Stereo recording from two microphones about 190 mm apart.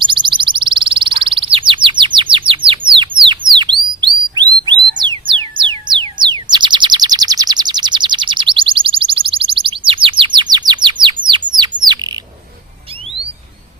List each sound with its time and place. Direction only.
0.0 s bird: 25° right (ahead or behind)
4.6 s music: 25° right (ahead or behind)